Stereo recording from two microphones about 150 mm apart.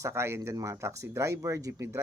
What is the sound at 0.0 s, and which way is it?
Speech, 15° right (ahead or behind).